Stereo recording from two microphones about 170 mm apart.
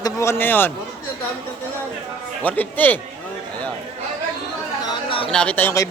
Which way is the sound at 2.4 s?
10° left (ahead or behind).